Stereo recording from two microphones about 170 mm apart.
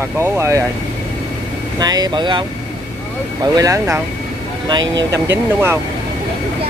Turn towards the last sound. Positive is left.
turn(degrees=-15)  # may be behind; listen again after turning